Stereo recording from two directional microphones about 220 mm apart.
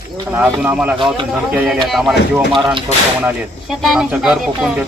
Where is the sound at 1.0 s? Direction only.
20° right (ahead or behind).